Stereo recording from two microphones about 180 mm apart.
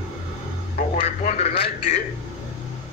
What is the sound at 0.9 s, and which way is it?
A man's voice, 40° left (ahead or behind).